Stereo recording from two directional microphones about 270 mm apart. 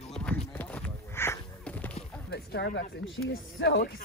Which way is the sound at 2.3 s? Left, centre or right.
Left.